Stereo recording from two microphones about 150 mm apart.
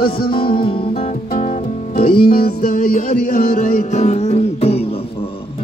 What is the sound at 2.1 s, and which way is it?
Music, 90° left.